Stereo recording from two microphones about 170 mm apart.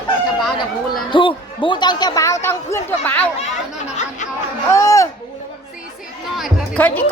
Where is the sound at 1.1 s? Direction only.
30° left (ahead or behind); by 3.2 s 15° left (ahead or behind).